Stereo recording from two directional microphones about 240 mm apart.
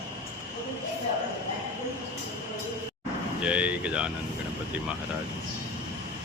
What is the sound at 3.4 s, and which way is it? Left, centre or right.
Vehicle, centre.